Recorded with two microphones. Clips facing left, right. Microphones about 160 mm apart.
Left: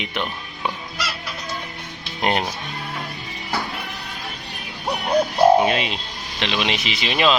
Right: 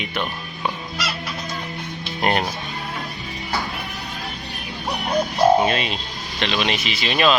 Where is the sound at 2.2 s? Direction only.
15° left (ahead or behind).